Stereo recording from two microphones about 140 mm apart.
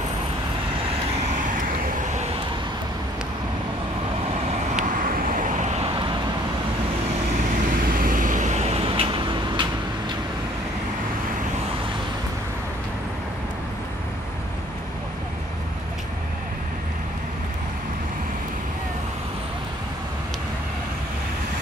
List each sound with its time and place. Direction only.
4.7 s vehicle: 70° right (ahead or behind)
5.8 s vehicle: 40° right (ahead or behind)
7.7 s vehicle: 90° right; by 9.7 s 35° right (ahead or behind)